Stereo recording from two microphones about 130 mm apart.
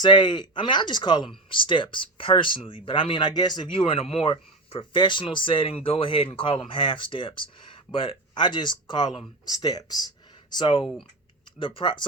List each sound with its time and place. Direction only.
0.0 s speech: 35° left (ahead or behind)
3.8 s speech: 45° left (ahead or behind)